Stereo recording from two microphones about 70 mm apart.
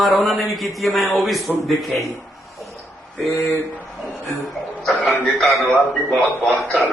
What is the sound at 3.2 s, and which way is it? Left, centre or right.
Speech, centre.